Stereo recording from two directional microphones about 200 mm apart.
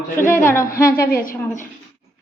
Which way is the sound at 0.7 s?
45° left (ahead or behind).